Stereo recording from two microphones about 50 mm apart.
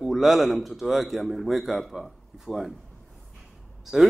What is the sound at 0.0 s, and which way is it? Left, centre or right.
A man's voice, centre.